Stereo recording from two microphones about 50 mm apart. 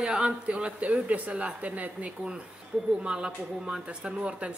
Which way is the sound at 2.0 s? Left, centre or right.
Centre.